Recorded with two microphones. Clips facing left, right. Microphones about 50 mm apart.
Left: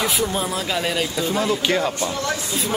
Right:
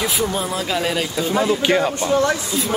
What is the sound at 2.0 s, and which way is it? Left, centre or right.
Speech, right.